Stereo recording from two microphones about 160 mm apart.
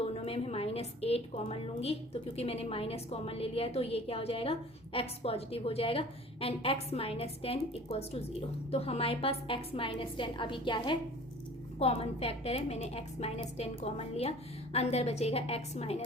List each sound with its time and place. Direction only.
0.1 s a woman's voice: 40° left (ahead or behind)